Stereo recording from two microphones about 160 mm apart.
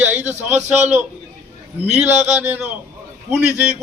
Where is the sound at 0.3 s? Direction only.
15° right (ahead or behind).